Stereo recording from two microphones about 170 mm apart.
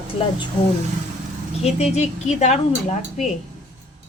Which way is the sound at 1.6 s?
40° left (ahead or behind).